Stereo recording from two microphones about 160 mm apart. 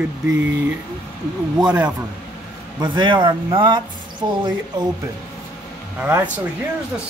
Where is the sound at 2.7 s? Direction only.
30° right (ahead or behind).